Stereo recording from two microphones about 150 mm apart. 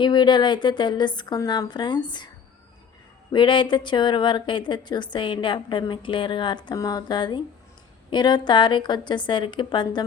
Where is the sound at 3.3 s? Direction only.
30° left (ahead or behind).